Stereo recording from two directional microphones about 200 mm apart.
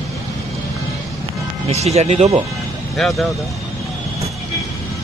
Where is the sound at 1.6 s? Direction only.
35° right (ahead or behind).